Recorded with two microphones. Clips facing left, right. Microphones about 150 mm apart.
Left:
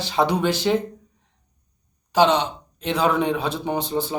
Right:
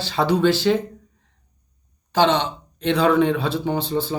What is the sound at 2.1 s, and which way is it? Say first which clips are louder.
Speech: even; 15° left (ahead or behind).